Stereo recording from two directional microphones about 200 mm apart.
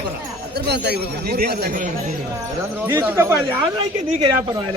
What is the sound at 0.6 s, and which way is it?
Speech, 55° right (ahead or behind).